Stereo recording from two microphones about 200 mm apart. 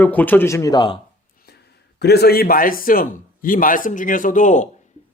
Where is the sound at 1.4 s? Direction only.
55° left (ahead or behind).